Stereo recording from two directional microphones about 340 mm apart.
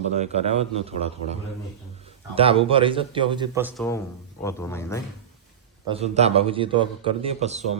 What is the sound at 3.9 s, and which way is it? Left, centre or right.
Speech, centre.